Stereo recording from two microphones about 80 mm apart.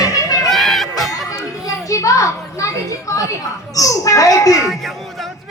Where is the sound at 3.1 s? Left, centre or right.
Left.